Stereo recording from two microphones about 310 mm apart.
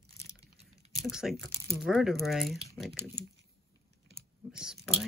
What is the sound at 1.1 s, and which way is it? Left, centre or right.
Speech, centre.